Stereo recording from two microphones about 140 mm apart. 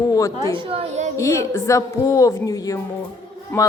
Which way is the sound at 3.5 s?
10° left (ahead or behind).